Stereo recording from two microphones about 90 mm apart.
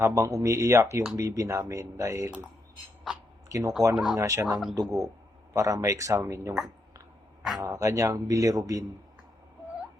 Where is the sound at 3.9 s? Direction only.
5° right (ahead or behind).